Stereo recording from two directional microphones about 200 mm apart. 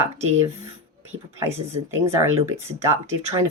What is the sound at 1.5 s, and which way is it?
Speech, 15° right (ahead or behind).